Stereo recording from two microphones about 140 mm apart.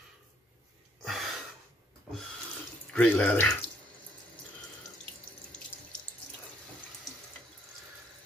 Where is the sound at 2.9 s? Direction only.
10° left (ahead or behind).